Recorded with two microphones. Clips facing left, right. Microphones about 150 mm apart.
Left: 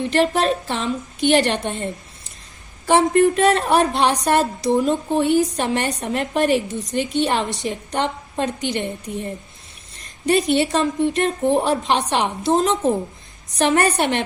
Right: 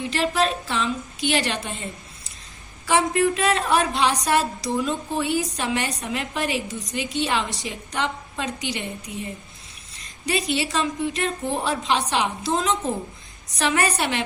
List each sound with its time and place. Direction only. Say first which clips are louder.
0.1 s a woman's voice: left 4 dB; 55° left (ahead or behind)
10.2 s a woman's voice: left 7 dB; 55° left (ahead or behind)